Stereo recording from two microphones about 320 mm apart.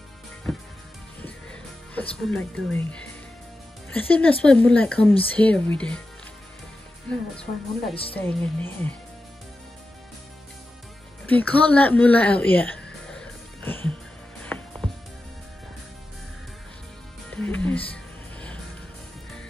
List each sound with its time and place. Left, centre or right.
0.5 s music: centre
3.9 s a woman's voice: centre
7.9 s speech: centre
8.2 s speech: centre
11.2 s music: centre
17.3 s music: centre